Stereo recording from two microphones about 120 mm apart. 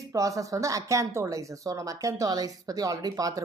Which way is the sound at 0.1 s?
25° right (ahead or behind).